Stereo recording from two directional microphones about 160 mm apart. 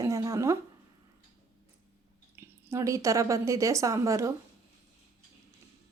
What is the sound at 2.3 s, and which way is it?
Speech, 15° right (ahead or behind).